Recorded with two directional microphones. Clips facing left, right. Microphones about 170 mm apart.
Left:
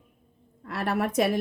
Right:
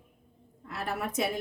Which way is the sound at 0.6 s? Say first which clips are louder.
Left 7 dB; 70° left (ahead or behind).